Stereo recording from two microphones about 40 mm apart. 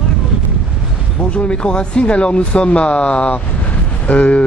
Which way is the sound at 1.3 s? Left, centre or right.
Left.